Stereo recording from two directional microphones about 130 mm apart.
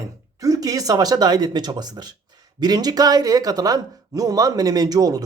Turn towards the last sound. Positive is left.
turn(degrees=-30)  # may be behind; listen again after turning